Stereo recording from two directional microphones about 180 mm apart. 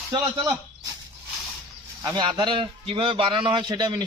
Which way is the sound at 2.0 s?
25° right (ahead or behind).